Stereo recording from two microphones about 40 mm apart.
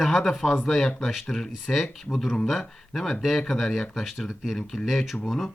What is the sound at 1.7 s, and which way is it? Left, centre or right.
Speech, centre.